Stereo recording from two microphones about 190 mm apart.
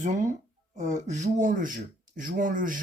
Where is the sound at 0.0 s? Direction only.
40° right (ahead or behind).